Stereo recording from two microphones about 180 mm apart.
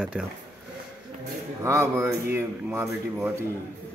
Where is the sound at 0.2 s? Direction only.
10° right (ahead or behind).